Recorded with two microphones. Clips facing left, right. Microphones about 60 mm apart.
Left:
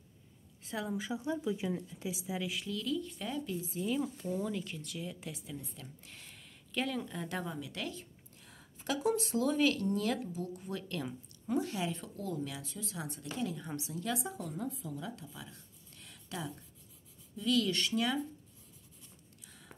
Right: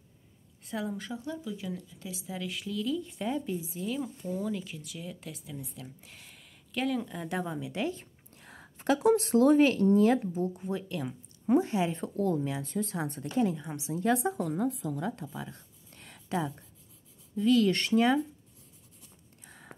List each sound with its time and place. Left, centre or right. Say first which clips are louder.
0.6 s a woman's voice: right 2 dB; centre
1.2 s speech: left 2 dB; centre
2.6 s speech: right 4 dB; centre
3.0 s speech: right 5 dB; centre
3.8 s speech: left 2 dB; centre; by 7.9 s right
7.9 s speech: right 5 dB; right
10.9 s speech: right 3 dB; centre
11.4 s speech: right 8 dB; right
14.3 s a woman's voice: right 9 dB; right
15.0 s speech: right 9 dB; right
15.5 s a sound: right 3 dB; right
17.4 s speech: right 7 dB; right
19.4 s a sound: right 7 dB; right